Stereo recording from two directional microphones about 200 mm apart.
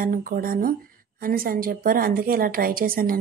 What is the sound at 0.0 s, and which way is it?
A woman's voice, 45° right (ahead or behind).